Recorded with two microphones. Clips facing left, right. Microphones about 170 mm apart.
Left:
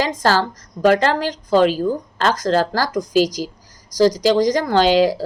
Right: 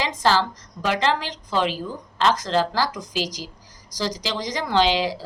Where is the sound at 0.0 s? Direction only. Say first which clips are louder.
Left 3 dB; 45° left (ahead or behind).